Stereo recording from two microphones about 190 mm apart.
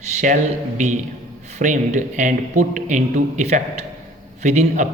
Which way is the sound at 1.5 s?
40° right (ahead or behind).